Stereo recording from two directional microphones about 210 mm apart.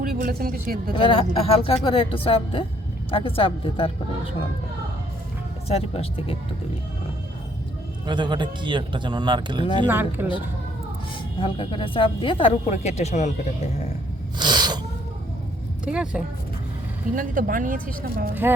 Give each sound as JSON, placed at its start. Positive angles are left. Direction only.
{"t": 0.0, "sound": "speech", "side_deg": -45}
{"t": 0.9, "sound": "speech", "side_deg": 25}
{"t": 5.6, "sound": "speech", "side_deg": 30}
{"t": 8.0, "sound": "speech", "side_deg": -20}
{"t": 9.9, "sound": "speech", "side_deg": -10}
{"t": 11.3, "sound": "speech", "side_deg": 25}
{"t": 14.3, "sound": "gasp", "side_deg": -20}
{"t": 15.8, "sound": "speech", "side_deg": -5}
{"t": 17.2, "sound": "speech", "side_deg": -40}